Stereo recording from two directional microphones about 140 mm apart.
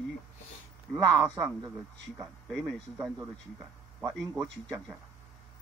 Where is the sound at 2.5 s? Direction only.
Centre (ahead or behind).